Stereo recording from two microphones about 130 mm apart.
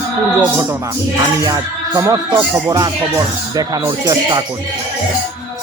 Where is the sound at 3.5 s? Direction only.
30° right (ahead or behind).